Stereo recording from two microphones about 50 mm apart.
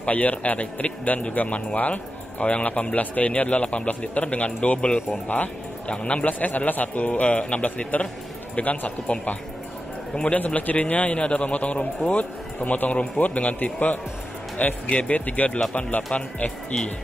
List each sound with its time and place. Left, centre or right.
0.0 s a man's voice: left
6.2 s a man's voice: left